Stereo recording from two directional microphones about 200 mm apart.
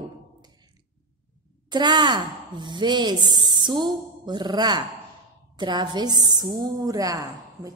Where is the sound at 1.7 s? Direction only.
20° right (ahead or behind).